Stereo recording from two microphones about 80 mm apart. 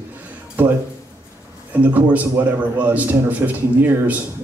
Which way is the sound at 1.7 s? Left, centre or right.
Centre.